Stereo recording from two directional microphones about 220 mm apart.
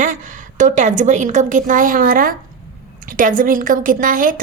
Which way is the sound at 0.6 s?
35° right (ahead or behind).